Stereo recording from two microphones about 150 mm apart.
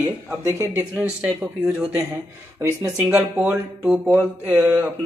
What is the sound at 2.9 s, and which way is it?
Speech, 5° right (ahead or behind).